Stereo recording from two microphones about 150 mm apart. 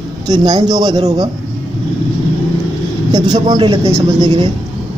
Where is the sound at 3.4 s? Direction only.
30° right (ahead or behind).